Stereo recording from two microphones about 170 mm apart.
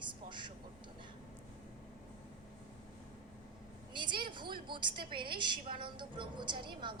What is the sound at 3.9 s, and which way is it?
A woman's voice, 25° right (ahead or behind).